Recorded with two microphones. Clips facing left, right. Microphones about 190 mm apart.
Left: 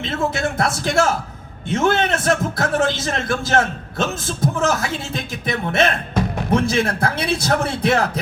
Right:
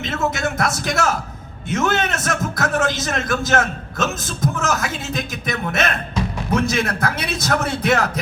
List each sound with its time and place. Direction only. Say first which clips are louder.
0.0 s a man's voice: left 1 dB; 30° left (ahead or behind)